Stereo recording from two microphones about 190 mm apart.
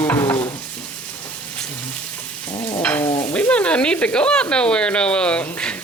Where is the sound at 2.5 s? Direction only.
25° left (ahead or behind).